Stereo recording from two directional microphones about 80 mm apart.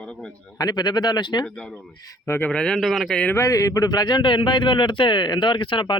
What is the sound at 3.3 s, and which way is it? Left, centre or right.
A man's voice, left.